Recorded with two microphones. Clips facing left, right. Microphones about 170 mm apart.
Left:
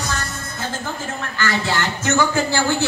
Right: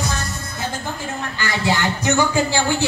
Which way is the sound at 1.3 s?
15° right (ahead or behind).